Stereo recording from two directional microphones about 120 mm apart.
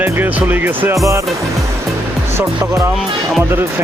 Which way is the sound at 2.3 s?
20° right (ahead or behind).